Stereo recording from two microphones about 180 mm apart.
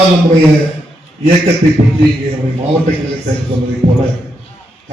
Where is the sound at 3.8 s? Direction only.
50° right (ahead or behind).